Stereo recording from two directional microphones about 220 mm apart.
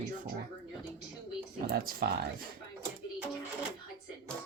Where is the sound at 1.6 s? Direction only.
45° right (ahead or behind).